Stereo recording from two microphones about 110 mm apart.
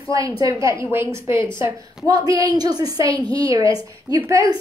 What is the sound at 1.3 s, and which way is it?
Speech, 45° left (ahead or behind).